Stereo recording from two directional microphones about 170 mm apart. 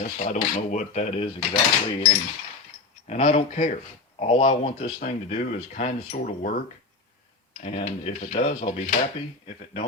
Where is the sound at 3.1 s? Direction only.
40° left (ahead or behind).